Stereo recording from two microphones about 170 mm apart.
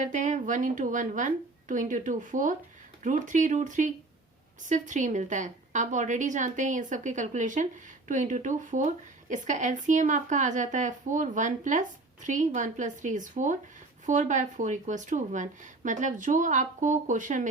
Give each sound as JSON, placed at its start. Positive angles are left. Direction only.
{"t": 0.0, "sound": "a woman's voice", "side_deg": -45}